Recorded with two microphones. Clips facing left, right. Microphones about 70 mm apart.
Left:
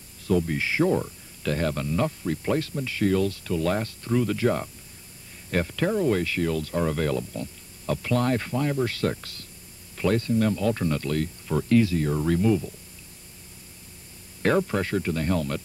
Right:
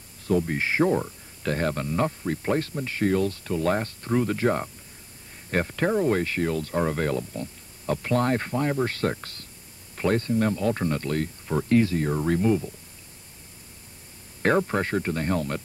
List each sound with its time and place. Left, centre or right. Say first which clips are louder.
0.3 s speech: even; right
14.7 s speech: even; right